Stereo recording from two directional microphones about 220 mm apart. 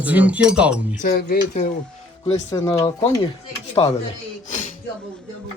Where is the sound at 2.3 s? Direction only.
15° left (ahead or behind).